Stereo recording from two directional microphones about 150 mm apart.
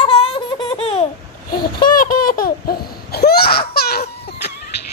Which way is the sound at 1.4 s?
65° left (ahead or behind).